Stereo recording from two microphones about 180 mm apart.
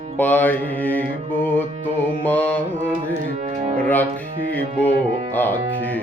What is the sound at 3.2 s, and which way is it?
Music, 40° right (ahead or behind).